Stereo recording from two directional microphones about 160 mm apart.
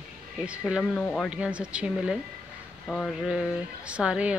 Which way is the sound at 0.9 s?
5° left (ahead or behind).